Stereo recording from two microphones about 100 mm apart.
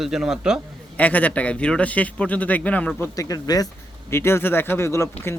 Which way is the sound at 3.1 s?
35° left (ahead or behind).